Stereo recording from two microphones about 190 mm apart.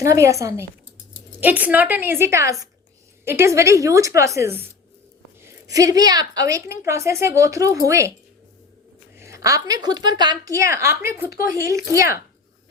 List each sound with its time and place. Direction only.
0.0 s a woman's voice: 15° right (ahead or behind)
9.1 s a woman's voice: 15° right (ahead or behind)